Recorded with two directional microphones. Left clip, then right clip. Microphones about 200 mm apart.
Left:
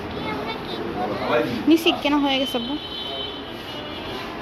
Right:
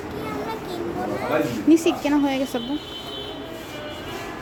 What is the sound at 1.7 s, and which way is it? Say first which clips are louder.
Speech: even; 25° right (ahead or behind).